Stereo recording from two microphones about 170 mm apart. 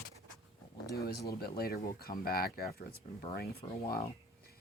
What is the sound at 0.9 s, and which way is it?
Speech, 65° left (ahead or behind).